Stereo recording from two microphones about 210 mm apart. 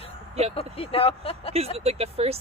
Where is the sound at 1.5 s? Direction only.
30° right (ahead or behind).